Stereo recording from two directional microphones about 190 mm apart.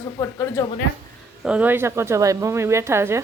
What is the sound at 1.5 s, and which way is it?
Speech, 10° right (ahead or behind).